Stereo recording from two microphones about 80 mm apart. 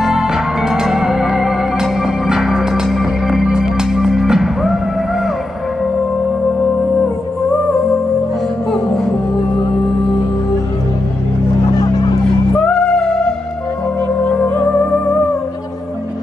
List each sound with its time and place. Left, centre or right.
0.0 s music: centre
12.5 s music: centre
14.2 s music: left